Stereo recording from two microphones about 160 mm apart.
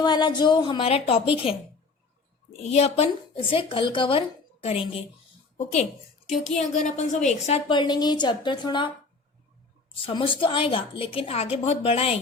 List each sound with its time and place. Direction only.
0.0 s a woman's voice: 30° left (ahead or behind)
6.7 s a woman's voice: 50° left (ahead or behind)
7.7 s a woman's voice: 25° left (ahead or behind)
10.1 s a woman's voice: 35° left (ahead or behind)